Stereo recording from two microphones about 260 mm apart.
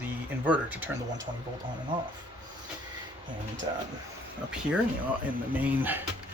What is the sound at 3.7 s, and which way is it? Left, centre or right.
Speech, centre.